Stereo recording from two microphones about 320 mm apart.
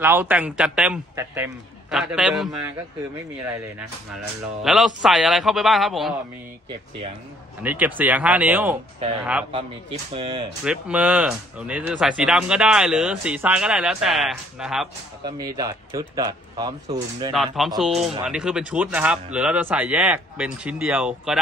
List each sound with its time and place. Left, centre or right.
0.0 s speech: centre
4.6 s speech: centre
7.6 s speech: centre
9.5 s speech: centre
10.6 s speech: centre
15.2 s speech: centre
17.3 s speech: centre